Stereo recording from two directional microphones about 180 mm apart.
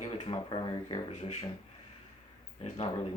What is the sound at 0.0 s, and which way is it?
Speech, 35° left (ahead or behind).